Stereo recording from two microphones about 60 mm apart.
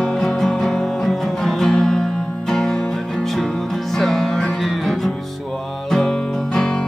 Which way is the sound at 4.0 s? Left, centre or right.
Centre.